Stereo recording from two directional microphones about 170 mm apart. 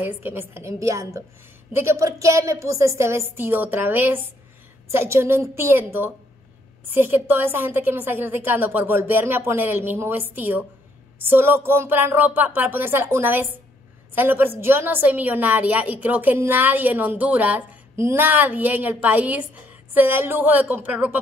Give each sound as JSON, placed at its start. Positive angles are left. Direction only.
{"t": 0.0, "sound": "a woman's voice", "side_deg": -15}